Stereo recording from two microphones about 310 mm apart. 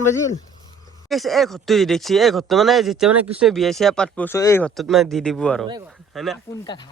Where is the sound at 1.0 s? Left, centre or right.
Centre.